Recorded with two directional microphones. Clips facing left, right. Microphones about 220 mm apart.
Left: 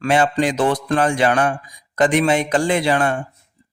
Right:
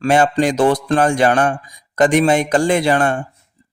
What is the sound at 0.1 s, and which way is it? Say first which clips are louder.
Speech: right 3 dB; 45° right (ahead or behind).